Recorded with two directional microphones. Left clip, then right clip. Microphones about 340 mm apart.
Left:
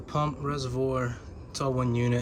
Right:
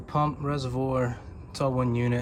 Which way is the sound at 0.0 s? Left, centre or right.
Centre.